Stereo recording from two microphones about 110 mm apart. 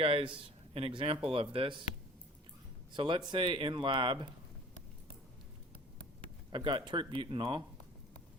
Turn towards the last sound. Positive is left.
turn(degrees=-50)  # may be behind; listen again after turning